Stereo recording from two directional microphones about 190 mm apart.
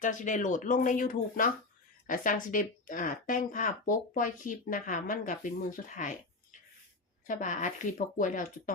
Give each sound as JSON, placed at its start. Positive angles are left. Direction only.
{"t": 0.0, "sound": "speech", "side_deg": 40}
{"t": 7.3, "sound": "speech", "side_deg": 40}